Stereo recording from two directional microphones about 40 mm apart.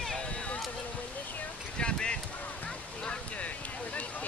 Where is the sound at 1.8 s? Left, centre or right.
Left.